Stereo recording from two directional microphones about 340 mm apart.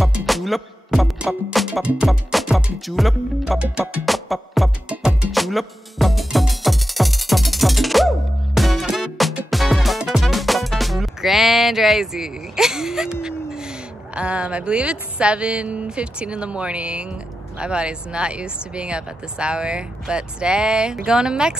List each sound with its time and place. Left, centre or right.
0.0 s music: centre
14.1 s speech: centre